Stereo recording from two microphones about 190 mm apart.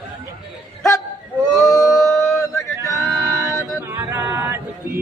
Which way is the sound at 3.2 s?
15° right (ahead or behind).